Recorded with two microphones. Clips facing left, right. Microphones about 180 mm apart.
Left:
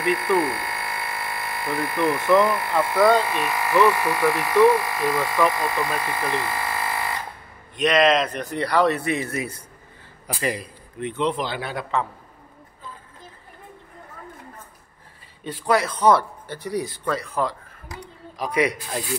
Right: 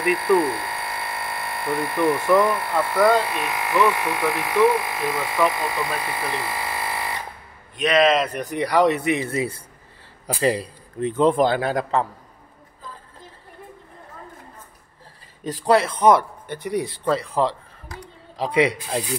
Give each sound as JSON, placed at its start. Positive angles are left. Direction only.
{"t": 0.0, "sound": "speech", "side_deg": 0}
{"t": 7.7, "sound": "a man's voice", "side_deg": 0}
{"t": 15.4, "sound": "speech", "side_deg": -35}